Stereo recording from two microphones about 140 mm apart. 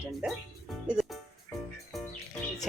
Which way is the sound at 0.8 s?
5° right (ahead or behind).